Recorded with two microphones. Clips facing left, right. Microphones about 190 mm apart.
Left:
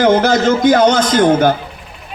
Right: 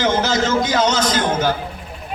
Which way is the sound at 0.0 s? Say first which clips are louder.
Left 7 dB; 55° left (ahead or behind).